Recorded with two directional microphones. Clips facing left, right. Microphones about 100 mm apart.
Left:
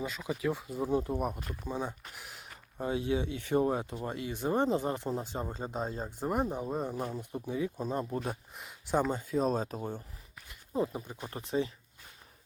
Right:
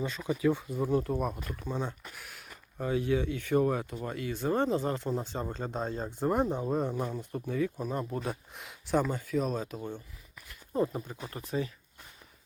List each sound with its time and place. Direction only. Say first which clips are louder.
0.0 s speech: right 4 dB; 5° left (ahead or behind)
0.7 s speech: right 2 dB; 15° left (ahead or behind)
2.1 s speech: even; 20° left (ahead or behind); by 7.2 s 5° left (ahead or behind)
7.2 s speech: right 2 dB; 15° left (ahead or behind)
9.4 s speech: left 2 dB; 35° left (ahead or behind)
10.8 s speech: right 2 dB; 15° left (ahead or behind)
11.2 s speech: left 3 dB; 30° left (ahead or behind)